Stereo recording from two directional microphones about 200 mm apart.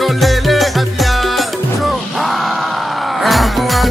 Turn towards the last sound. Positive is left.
turn(degrees=0)  # may be behind; listen again after turning